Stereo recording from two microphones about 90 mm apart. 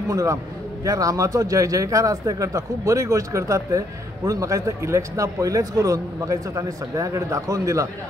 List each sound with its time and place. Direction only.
0.1 s a man's voice: 35° right (ahead or behind)